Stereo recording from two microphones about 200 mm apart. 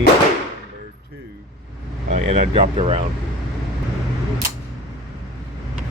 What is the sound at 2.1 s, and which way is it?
Speech, 35° right (ahead or behind).